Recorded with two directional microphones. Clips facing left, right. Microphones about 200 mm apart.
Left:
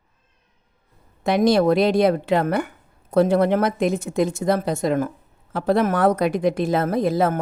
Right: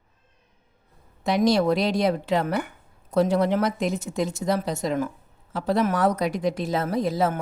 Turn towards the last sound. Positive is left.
turn(degrees=55)  # may be behind; listen again after turning